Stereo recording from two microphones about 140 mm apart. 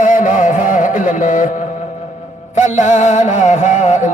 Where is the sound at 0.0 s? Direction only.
70° left (ahead or behind).